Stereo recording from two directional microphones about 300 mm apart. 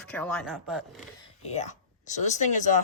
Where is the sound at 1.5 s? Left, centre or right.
Left.